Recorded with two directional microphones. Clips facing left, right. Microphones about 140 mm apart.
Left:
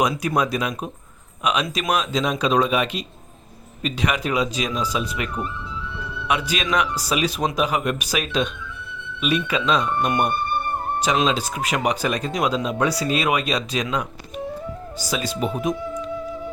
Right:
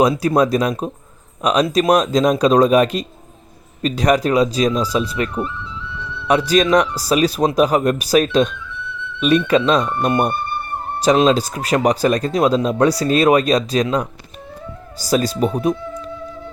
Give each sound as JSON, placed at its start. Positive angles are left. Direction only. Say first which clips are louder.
{"t": 0.0, "sound": "speech", "louder": "right 7 dB", "side_deg": -35}